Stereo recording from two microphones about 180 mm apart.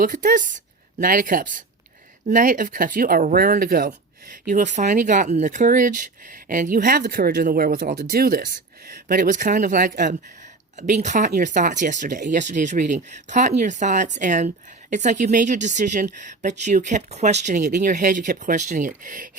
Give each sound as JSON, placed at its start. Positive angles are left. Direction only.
{"t": 0.0, "sound": "a woman's voice", "side_deg": -45}
{"t": 4.5, "sound": "speech", "side_deg": -40}